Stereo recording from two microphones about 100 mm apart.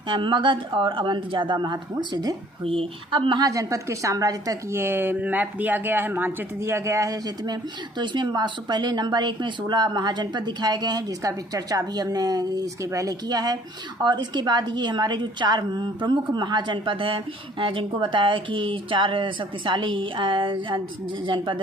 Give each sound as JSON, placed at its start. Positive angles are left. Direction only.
{"t": 0.1, "sound": "a woman's voice", "side_deg": -55}
{"t": 2.6, "sound": "speech", "side_deg": -60}
{"t": 3.4, "sound": "speech", "side_deg": -35}
{"t": 4.7, "sound": "a woman's voice", "side_deg": -20}